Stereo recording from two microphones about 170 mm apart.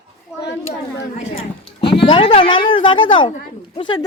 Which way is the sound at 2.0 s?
30° left (ahead or behind).